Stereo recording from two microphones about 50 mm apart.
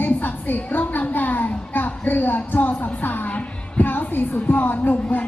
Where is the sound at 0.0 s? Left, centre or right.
Left.